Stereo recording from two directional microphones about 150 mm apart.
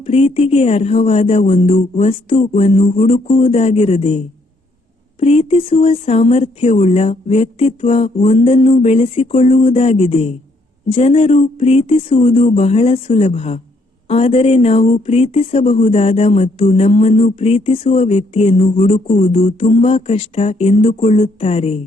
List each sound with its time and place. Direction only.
0.0 s speech: 45° left (ahead or behind)
5.2 s speech: 40° left (ahead or behind)